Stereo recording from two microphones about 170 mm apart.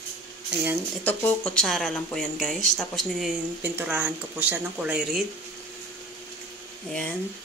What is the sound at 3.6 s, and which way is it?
Speech, 10° right (ahead or behind).